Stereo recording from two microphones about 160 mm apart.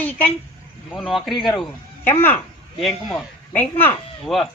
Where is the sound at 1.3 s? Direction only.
30° left (ahead or behind).